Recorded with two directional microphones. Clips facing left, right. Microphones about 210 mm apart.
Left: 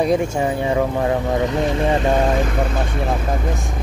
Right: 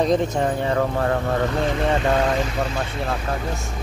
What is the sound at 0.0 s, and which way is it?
Speech, 10° left (ahead or behind).